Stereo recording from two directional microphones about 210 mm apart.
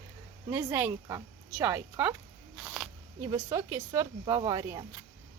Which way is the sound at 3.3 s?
15° right (ahead or behind).